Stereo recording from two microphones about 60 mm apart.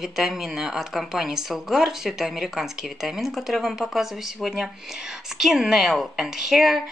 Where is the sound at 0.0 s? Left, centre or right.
Centre.